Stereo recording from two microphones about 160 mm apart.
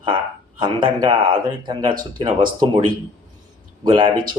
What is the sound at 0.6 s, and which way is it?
A man's voice, 25° right (ahead or behind).